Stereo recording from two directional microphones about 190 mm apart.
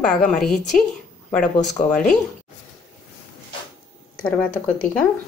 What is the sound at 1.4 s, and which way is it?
Speech, 40° left (ahead or behind).